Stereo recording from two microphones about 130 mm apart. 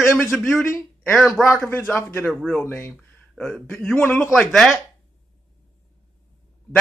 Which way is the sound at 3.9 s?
15° left (ahead or behind).